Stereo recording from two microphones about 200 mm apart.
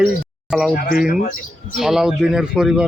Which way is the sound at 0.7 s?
50° left (ahead or behind).